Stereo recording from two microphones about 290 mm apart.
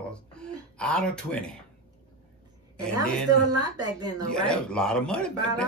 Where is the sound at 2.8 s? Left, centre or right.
Centre.